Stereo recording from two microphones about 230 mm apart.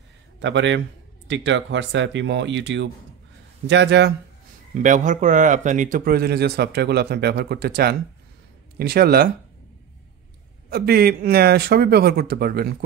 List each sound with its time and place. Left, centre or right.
0.4 s a man's voice: right
4.7 s a man's voice: right
10.7 s a man's voice: right